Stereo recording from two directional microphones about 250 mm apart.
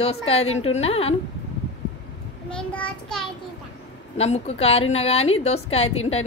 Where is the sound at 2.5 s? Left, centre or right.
Centre.